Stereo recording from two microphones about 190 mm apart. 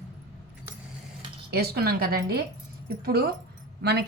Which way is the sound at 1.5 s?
55° right (ahead or behind).